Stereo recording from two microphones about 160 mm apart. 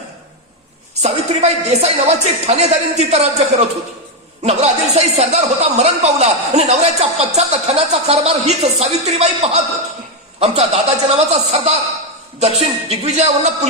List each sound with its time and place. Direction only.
1.0 s a man's voice: 45° right (ahead or behind)